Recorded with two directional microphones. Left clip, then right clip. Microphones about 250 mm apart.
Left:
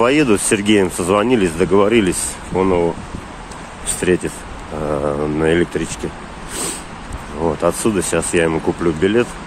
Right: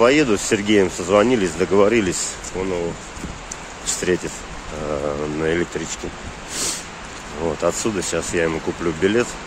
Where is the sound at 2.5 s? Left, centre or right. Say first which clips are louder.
Left 9 dB; left.